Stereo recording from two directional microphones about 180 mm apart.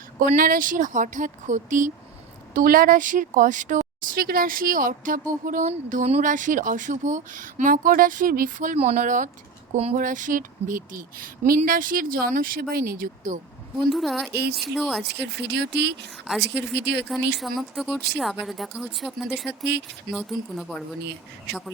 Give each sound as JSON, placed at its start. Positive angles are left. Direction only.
{"t": 0.2, "sound": "a woman's voice", "side_deg": -50}
{"t": 13.9, "sound": "speech", "side_deg": 0}
{"t": 15.0, "sound": "speech", "side_deg": -70}
{"t": 17.4, "sound": "speech", "side_deg": 0}
{"t": 21.5, "sound": "speech", "side_deg": -65}